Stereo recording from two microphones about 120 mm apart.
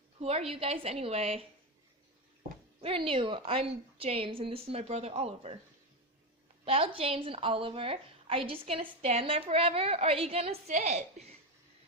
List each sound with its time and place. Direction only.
0.2 s a woman's voice: 55° right (ahead or behind)
2.8 s a woman's voice: 50° right (ahead or behind)
6.7 s a woman's voice: 50° right (ahead or behind)